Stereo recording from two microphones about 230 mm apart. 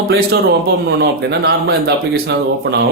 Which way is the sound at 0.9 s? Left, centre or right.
Right.